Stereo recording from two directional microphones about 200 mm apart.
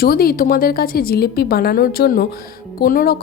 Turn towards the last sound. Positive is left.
turn(degrees=45)  # may be behind; listen again after turning